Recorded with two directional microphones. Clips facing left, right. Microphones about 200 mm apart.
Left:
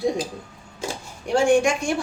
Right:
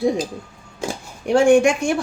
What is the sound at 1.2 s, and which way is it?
Speech, 60° right (ahead or behind).